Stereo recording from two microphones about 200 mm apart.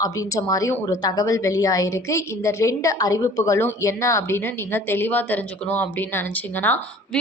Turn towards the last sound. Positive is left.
turn(degrees=10)  # may be behind; listen again after turning